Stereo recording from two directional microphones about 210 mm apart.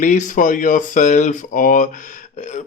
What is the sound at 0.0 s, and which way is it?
Speech, 35° left (ahead or behind).